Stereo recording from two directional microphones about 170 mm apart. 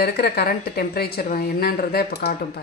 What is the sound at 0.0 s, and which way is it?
A woman's voice, 65° left (ahead or behind).